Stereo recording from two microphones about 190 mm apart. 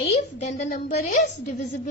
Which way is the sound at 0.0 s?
35° left (ahead or behind).